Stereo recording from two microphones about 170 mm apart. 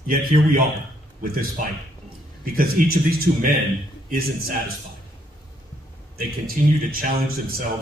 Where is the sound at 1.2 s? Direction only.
60° right (ahead or behind).